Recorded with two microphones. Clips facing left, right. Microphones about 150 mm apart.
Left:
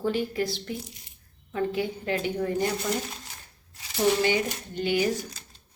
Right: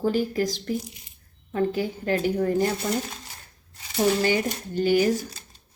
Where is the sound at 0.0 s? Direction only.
40° right (ahead or behind).